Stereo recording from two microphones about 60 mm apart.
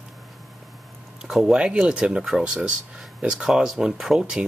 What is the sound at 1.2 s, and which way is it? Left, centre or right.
Speech, centre.